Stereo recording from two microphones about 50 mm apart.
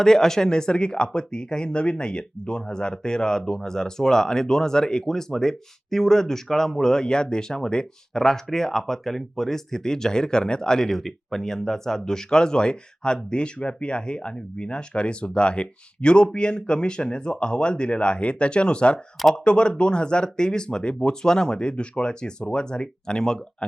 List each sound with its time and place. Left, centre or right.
0.0 s speech: centre